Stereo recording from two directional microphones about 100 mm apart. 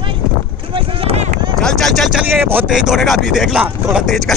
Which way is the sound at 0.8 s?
70° right (ahead or behind).